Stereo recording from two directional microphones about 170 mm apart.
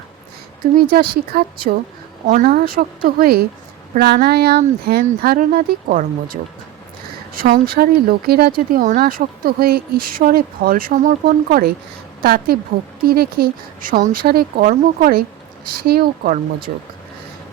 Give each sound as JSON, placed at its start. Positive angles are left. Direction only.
{"t": 0.6, "sound": "speech", "side_deg": -60}